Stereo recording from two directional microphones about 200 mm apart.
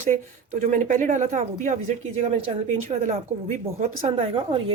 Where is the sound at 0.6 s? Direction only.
40° right (ahead or behind).